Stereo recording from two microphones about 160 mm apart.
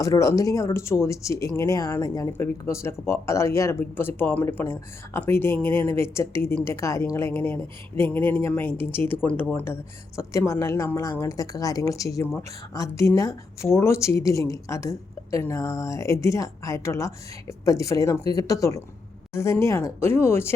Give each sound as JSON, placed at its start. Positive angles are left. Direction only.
{"t": 0.0, "sound": "a woman's voice", "side_deg": 20}